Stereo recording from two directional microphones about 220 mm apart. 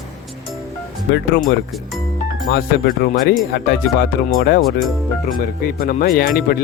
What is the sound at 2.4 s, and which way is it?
Speech, 45° left (ahead or behind).